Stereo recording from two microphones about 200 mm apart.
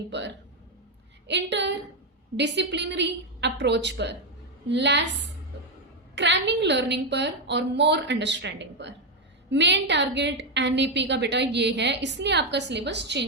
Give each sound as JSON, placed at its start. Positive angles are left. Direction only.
{"t": 0.1, "sound": "a woman's voice", "side_deg": -60}
{"t": 6.1, "sound": "a woman's voice", "side_deg": -60}